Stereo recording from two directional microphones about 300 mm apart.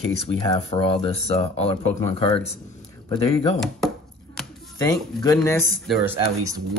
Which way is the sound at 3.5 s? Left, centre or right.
Centre.